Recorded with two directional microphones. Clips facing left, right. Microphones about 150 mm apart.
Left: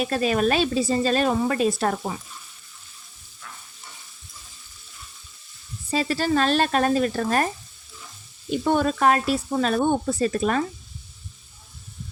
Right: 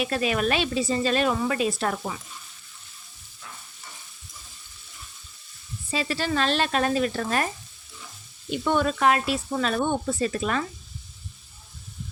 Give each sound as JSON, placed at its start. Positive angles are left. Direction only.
{"t": 0.0, "sound": "speech", "side_deg": 40}
{"t": 5.9, "sound": "speech", "side_deg": 40}
{"t": 8.4, "sound": "speech", "side_deg": 40}